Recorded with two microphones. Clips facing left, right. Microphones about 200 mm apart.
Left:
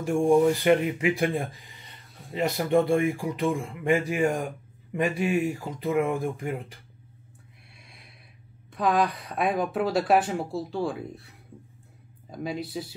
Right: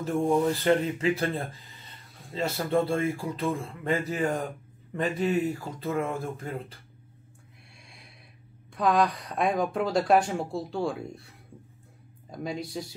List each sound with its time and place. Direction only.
0.0 s speech: 15° left (ahead or behind)
7.8 s snort: centre (ahead or behind)
8.7 s speech: centre (ahead or behind)